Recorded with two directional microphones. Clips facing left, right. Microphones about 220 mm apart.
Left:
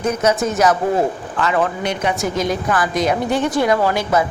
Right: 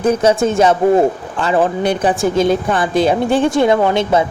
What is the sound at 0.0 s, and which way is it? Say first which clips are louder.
A man's voice: right 5 dB; 30° right (ahead or behind).